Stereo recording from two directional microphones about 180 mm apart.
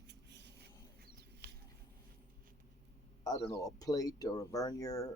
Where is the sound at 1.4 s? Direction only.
65° right (ahead or behind).